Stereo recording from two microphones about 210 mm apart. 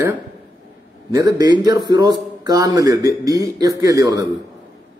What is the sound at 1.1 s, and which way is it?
A man's voice, 15° right (ahead or behind).